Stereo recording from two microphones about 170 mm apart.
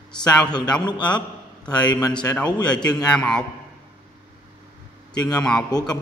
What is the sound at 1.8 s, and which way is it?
Speech, 25° left (ahead or behind).